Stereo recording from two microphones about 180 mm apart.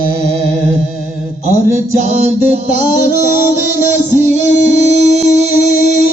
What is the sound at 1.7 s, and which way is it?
Music, 40° right (ahead or behind).